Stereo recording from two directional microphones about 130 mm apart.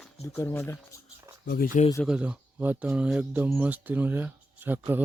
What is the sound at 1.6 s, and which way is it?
Speech, 90° left.